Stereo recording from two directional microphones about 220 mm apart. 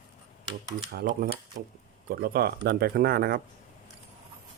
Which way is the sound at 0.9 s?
40° right (ahead or behind).